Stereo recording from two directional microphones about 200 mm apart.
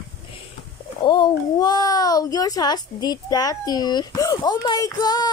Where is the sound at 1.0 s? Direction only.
20° left (ahead or behind).